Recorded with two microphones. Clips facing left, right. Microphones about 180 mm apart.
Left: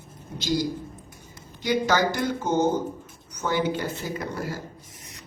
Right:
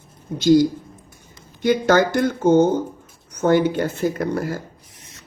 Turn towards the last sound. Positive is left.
turn(degrees=-55)  # may be behind; listen again after turning